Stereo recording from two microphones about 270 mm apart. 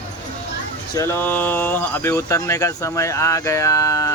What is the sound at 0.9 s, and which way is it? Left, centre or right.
Speech, centre.